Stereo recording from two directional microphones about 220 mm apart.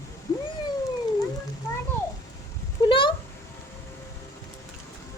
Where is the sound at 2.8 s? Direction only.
25° left (ahead or behind).